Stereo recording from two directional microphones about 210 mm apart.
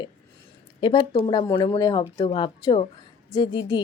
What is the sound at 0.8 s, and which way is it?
A woman's voice, 20° left (ahead or behind).